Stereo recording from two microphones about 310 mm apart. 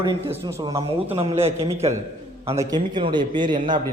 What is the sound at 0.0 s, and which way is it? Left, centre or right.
A man's voice, centre.